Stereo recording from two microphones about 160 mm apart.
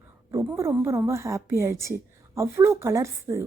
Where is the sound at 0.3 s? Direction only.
20° right (ahead or behind).